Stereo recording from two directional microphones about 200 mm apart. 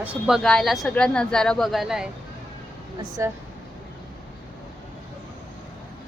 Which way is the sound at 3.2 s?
15° right (ahead or behind).